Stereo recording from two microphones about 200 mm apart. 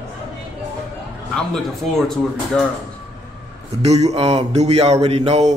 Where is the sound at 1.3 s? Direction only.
Centre (ahead or behind).